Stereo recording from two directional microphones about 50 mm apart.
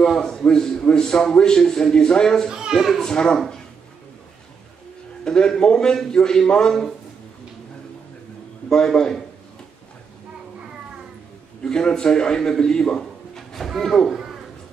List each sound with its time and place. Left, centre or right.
0.0 s a man's voice: centre
3.0 s a man's voice: centre
5.2 s a man's voice: centre
8.6 s a man's voice: centre
11.6 s a man's voice: centre